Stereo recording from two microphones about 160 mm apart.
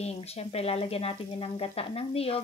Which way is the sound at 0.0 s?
40° left (ahead or behind).